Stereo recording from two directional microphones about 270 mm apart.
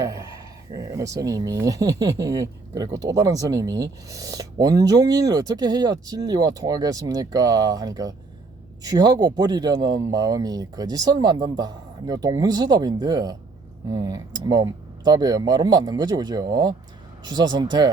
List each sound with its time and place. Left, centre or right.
0.0 s speech: centre